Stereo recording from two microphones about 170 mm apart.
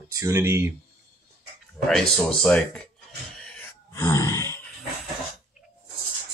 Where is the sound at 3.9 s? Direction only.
15° left (ahead or behind).